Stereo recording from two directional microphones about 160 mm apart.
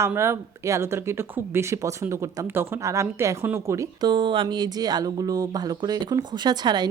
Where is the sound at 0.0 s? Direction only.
15° right (ahead or behind).